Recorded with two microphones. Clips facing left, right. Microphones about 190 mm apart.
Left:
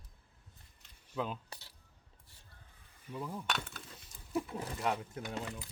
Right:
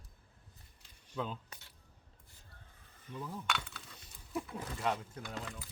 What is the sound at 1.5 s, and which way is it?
Coin, 35° left (ahead or behind).